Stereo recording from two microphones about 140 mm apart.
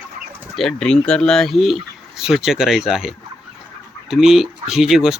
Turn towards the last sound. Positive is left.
turn(degrees=-5)  # may be behind; listen again after turning